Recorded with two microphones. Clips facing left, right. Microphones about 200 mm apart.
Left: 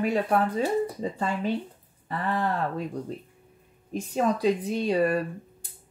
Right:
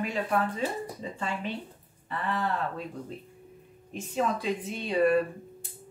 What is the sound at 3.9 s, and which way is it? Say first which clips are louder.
Speech: left 4 dB; 40° left (ahead or behind).